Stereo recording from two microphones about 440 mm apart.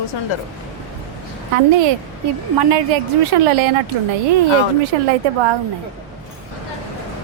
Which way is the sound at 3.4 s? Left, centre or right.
Right.